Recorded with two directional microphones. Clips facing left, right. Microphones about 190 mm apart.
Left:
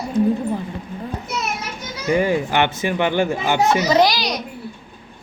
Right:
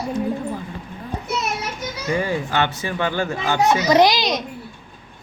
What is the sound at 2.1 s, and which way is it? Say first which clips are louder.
A child's voice: left 5 dB; 15° left (ahead or behind).